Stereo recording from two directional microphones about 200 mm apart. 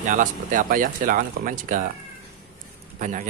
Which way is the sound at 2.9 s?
40° right (ahead or behind).